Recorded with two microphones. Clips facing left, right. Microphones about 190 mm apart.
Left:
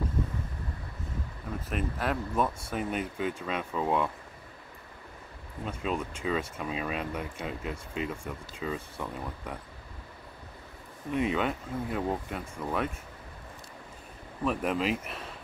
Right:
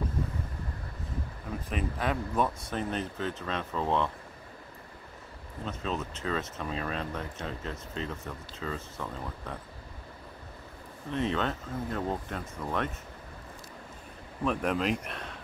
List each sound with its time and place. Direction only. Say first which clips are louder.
1.7 s speech: even; centre (ahead or behind)
5.7 s speech: left 2 dB; 10° left (ahead or behind)
11.1 s speech: left 2 dB; 10° left (ahead or behind)
14.4 s speech: even; centre (ahead or behind)